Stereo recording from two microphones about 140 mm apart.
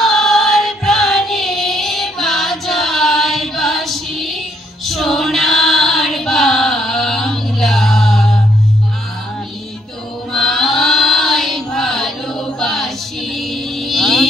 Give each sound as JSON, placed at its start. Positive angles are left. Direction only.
{"t": 0.0, "sound": "child singing", "side_deg": 0}
{"t": 4.8, "sound": "choir", "side_deg": 0}
{"t": 10.3, "sound": "chant", "side_deg": 5}
{"t": 12.5, "sound": "choir", "side_deg": 0}
{"t": 13.4, "sound": "vehicle", "side_deg": 0}